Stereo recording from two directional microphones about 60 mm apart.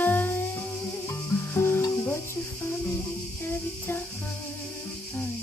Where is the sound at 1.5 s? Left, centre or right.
Left.